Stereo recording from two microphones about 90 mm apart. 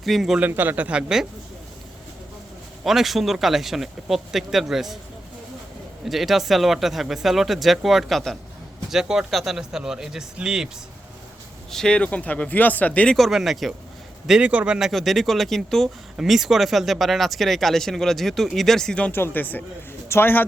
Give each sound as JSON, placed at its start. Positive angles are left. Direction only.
{"t": 0.0, "sound": "speech", "side_deg": 0}
{"t": 0.3, "sound": "a man's voice", "side_deg": -20}
{"t": 2.8, "sound": "speech", "side_deg": -5}
{"t": 6.1, "sound": "speech", "side_deg": 0}
{"t": 11.7, "sound": "speech", "side_deg": 10}
{"t": 13.1, "sound": "speech", "side_deg": 0}
{"t": 19.1, "sound": "speech", "side_deg": 25}